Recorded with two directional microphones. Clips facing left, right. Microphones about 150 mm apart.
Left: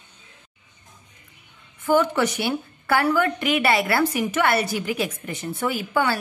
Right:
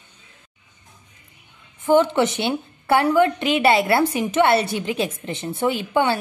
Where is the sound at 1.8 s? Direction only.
25° right (ahead or behind).